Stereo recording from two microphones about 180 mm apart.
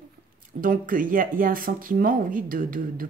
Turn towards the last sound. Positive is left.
turn(degrees=-50)  # may be behind; listen again after turning